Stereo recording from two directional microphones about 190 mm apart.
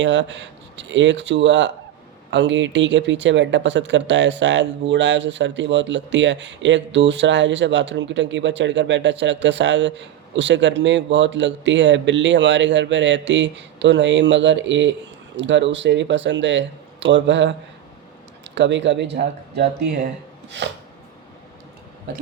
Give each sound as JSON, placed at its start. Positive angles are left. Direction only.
{"t": 0.0, "sound": "speech", "side_deg": -70}